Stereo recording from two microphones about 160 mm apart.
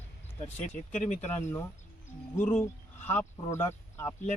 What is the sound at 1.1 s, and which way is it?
Speech, 45° left (ahead or behind).